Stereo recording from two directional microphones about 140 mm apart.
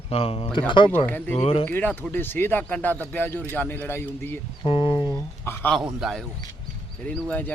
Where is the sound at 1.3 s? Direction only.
45° left (ahead or behind).